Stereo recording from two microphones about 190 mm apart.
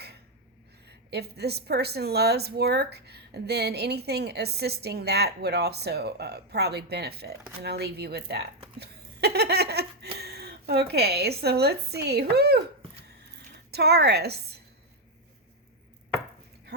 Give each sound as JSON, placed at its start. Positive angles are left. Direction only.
{"t": 0.9, "sound": "a woman's voice", "side_deg": -60}
{"t": 8.8, "sound": "laughter", "side_deg": -60}
{"t": 10.2, "sound": "speech", "side_deg": -55}
{"t": 13.7, "sound": "a woman's voice", "side_deg": -60}